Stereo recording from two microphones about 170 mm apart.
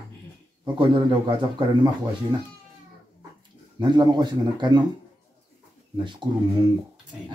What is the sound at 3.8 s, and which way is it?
Speech, 25° right (ahead or behind).